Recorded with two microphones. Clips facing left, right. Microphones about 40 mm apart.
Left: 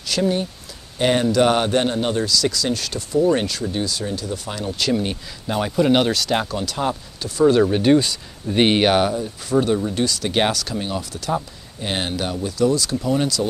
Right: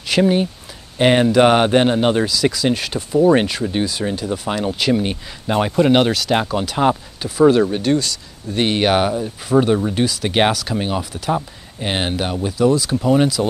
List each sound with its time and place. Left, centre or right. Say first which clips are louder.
0.0 s speech: right 5 dB; right
2.2 s speech: right 3 dB; right
4.7 s speech: right 3 dB; centre
7.6 s speech: left 2 dB; centre
8.8 s speech: right 1 dB; centre
10.8 s speech: right 4 dB; right
11.1 s speech: right 3 dB; centre